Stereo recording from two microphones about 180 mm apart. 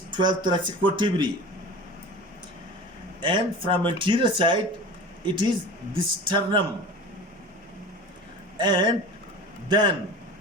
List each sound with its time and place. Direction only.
0.1 s speech: 25° right (ahead or behind)
3.2 s speech: 25° right (ahead or behind)
8.5 s a man's voice: 25° right (ahead or behind)